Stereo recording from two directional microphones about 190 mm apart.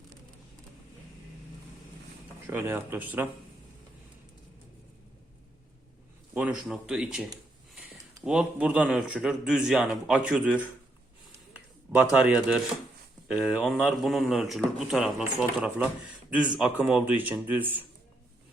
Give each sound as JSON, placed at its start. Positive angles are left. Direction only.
{"t": 2.5, "sound": "speech", "side_deg": -10}
{"t": 6.3, "sound": "a man's voice", "side_deg": -5}
{"t": 12.2, "sound": "a man's voice", "side_deg": -5}